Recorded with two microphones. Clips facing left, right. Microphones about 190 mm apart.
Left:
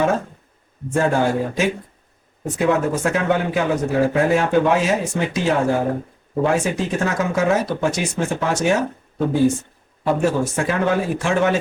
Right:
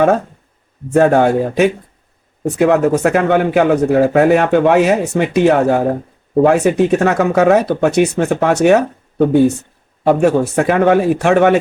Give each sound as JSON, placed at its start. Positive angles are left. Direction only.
{"t": 0.9, "sound": "speech", "side_deg": -60}